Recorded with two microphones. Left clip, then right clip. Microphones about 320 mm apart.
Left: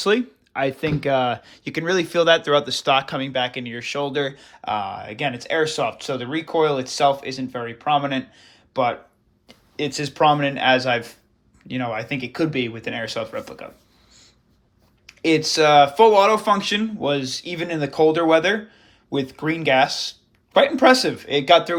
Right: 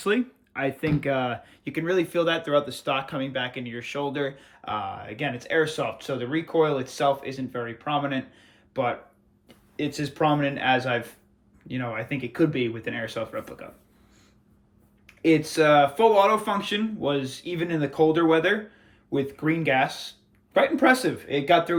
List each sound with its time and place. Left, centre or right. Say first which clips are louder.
0.0 s speech: left 5 dB; centre
15.0 s speech: left 3 dB; centre